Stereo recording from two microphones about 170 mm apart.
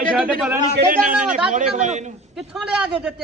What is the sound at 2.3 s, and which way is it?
Speech, 5° right (ahead or behind).